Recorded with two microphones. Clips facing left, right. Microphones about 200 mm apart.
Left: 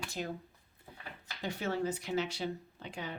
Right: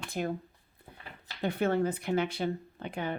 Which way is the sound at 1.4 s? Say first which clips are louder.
Right 6 dB; 55° right (ahead or behind).